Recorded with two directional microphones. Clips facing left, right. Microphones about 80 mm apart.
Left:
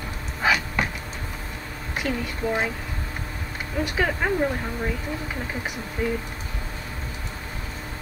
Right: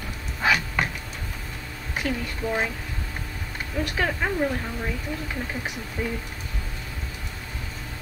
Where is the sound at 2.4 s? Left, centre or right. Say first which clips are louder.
Left 2 dB; left.